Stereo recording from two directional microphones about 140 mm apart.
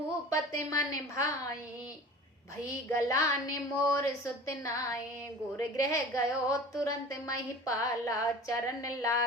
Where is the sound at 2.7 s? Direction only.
20° left (ahead or behind).